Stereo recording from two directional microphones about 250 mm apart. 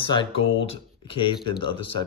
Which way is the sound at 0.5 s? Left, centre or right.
Left.